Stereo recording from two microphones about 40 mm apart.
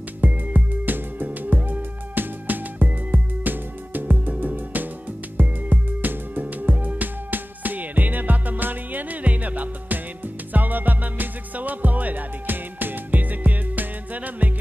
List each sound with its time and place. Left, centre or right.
0.2 s music: right